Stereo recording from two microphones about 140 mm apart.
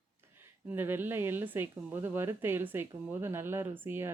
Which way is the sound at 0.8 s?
15° right (ahead or behind).